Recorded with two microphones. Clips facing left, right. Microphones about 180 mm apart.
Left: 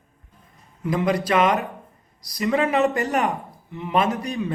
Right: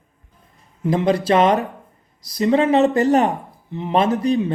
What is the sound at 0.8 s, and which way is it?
Speech, 30° right (ahead or behind).